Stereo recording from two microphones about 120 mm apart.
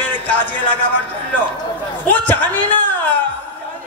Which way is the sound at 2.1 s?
15° left (ahead or behind).